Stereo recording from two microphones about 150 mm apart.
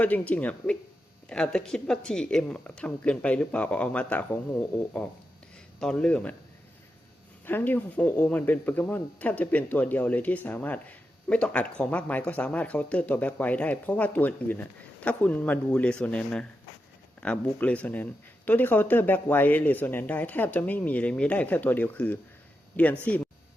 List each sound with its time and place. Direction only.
0.0 s speech: 10° left (ahead or behind)
7.4 s speech: 15° left (ahead or behind)